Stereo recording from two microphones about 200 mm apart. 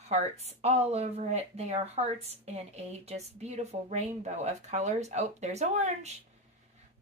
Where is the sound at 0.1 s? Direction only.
30° right (ahead or behind).